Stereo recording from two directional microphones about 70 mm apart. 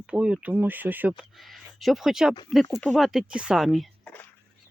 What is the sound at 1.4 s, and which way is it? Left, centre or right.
Speech, centre.